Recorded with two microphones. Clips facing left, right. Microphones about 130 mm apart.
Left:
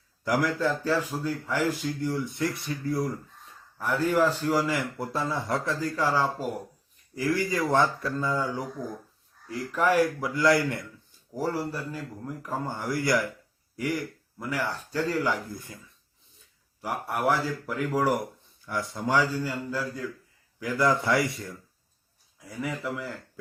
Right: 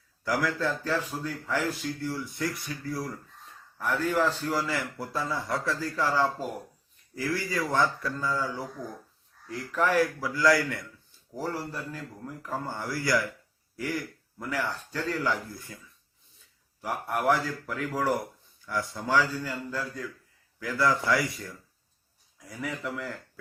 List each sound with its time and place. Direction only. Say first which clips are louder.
0.3 s a man's voice: left 3 dB; 15° left (ahead or behind)
3.8 s a man's voice: left 3 dB; 10° left (ahead or behind)
4.9 s speech: left 2 dB; 25° left (ahead or behind)
11.3 s a man's voice: left 4 dB; 10° left (ahead or behind)
13.7 s a sound: left 3 dB; 15° left (ahead or behind)
14.6 s a man's voice: left 4 dB; 10° left (ahead or behind)
17.2 s a man's voice: left 1 dB; 10° left (ahead or behind)
22.6 s a man's voice: left 2 dB; 5° left (ahead or behind)